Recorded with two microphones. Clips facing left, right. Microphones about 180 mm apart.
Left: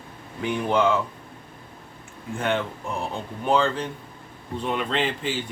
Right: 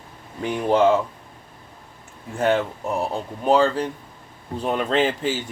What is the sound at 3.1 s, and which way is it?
Speech, 40° right (ahead or behind).